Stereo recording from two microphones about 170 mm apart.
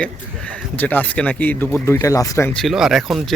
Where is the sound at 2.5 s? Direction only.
Centre (ahead or behind).